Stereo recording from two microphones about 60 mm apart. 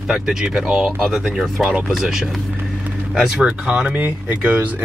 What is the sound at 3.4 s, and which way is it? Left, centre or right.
Speech, centre.